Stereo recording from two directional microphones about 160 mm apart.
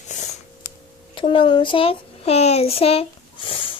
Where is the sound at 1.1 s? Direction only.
30° left (ahead or behind).